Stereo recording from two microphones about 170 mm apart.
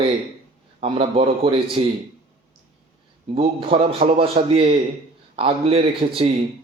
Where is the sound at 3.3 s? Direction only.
35° right (ahead or behind).